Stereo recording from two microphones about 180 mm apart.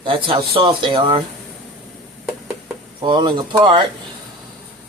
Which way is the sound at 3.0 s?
25° right (ahead or behind).